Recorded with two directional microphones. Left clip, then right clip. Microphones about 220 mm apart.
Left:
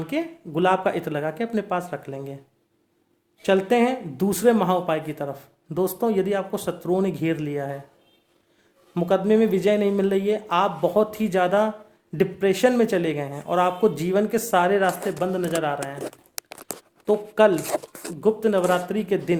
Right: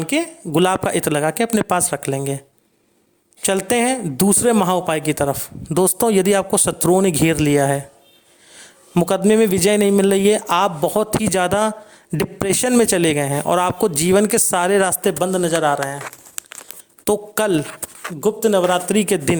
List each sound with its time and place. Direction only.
0.0 s speech: 40° right (ahead or behind)
3.4 s speech: 45° right (ahead or behind)
17.1 s speech: 45° right (ahead or behind)
18.2 s speech: 30° right (ahead or behind)